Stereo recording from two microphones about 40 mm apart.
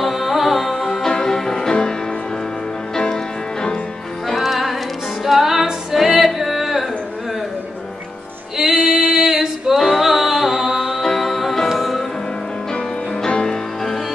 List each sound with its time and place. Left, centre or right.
0.0 s music: centre
1.0 s music: centre
4.3 s music: centre
8.5 s female singing: centre
9.9 s music: centre
11.0 s music: centre
12.7 s music: left